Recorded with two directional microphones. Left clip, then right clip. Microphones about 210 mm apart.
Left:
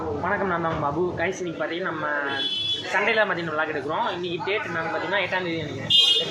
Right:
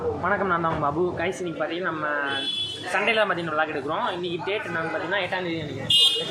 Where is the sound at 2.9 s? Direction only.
10° right (ahead or behind).